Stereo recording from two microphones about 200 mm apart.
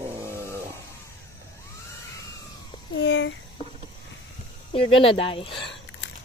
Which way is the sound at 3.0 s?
65° left (ahead or behind).